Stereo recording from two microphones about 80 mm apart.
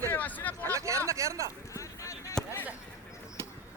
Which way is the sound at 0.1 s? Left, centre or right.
Left.